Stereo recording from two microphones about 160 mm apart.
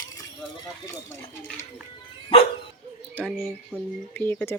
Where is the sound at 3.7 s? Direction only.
5° left (ahead or behind).